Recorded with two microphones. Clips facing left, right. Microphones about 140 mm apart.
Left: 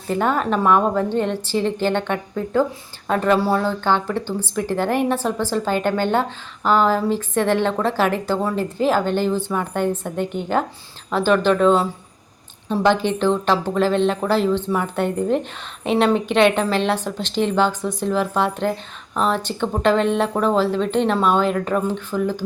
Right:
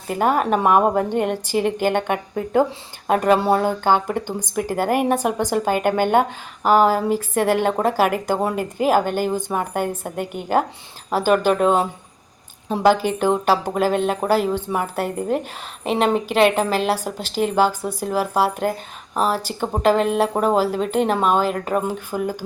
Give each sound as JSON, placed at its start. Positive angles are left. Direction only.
{"t": 0.1, "sound": "speech", "side_deg": -10}
{"t": 3.8, "sound": "speech", "side_deg": -15}
{"t": 7.7, "sound": "speech", "side_deg": -45}
{"t": 7.9, "sound": "speech", "side_deg": -10}
{"t": 12.8, "sound": "a woman's voice", "side_deg": -5}